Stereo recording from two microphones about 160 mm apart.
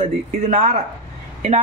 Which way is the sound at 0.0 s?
45° right (ahead or behind).